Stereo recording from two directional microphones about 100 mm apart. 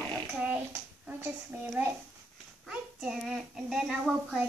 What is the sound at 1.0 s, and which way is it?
Speech, 25° right (ahead or behind).